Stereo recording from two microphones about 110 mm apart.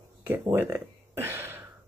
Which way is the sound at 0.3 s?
20° right (ahead or behind).